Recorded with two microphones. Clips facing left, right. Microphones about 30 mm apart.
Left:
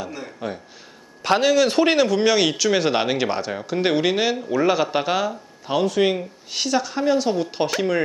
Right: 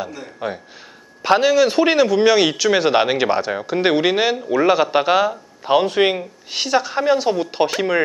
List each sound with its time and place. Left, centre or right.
0.4 s speech: centre
5.7 s speech: right
6.1 s speech: centre